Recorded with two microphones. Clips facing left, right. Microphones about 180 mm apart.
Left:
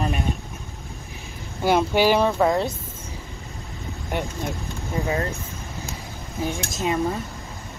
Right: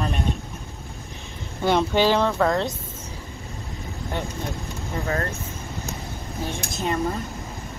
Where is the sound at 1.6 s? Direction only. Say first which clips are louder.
Left 1 dB; 5° left (ahead or behind).